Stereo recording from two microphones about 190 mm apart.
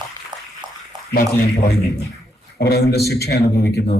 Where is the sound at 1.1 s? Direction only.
55° left (ahead or behind).